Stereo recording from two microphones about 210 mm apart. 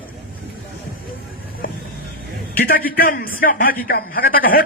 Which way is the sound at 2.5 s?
45° left (ahead or behind).